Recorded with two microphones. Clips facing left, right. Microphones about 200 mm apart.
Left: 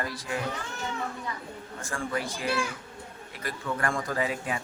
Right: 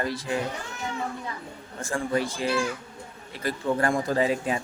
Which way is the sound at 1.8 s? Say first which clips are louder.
Right 6 dB; 25° right (ahead or behind).